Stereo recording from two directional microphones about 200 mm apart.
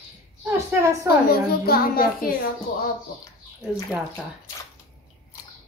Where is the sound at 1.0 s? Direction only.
50° left (ahead or behind).